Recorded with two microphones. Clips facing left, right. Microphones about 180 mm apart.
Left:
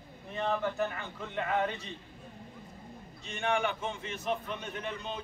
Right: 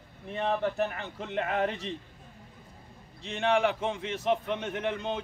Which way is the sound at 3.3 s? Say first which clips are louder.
Right 5 dB; 70° right (ahead or behind).